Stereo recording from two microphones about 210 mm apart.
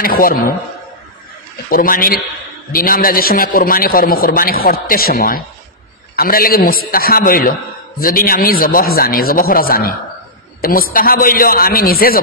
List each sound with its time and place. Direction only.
0.0 s a man's voice: 45° left (ahead or behind)
1.7 s a man's voice: 45° left (ahead or behind)